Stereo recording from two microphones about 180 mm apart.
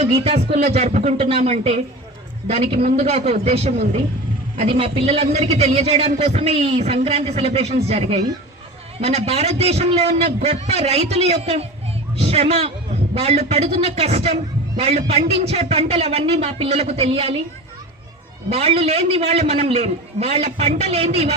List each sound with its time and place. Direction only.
0.0 s a man's voice: 35° right (ahead or behind)
18.4 s a man's voice: 35° right (ahead or behind)